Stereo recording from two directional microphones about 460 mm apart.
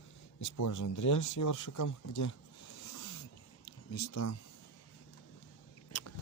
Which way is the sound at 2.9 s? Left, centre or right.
Left.